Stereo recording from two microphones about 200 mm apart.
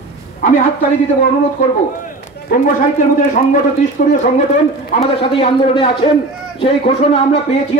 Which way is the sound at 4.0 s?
40° left (ahead or behind).